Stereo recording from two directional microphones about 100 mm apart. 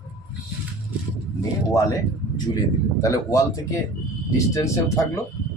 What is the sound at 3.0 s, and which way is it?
Speech, 30° left (ahead or behind).